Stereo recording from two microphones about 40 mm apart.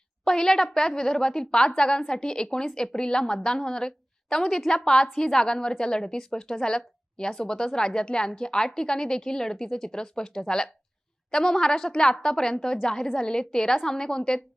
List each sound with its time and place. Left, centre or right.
0.3 s a woman's voice: centre